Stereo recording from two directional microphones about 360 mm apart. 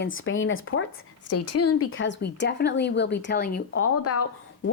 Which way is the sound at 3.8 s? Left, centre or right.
Left.